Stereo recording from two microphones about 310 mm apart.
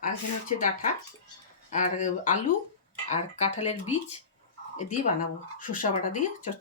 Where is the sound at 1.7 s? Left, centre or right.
Left.